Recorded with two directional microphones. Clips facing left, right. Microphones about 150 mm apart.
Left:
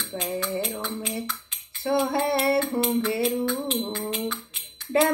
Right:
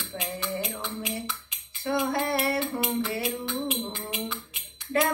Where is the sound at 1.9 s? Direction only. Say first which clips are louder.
Left 3 dB; 30° left (ahead or behind).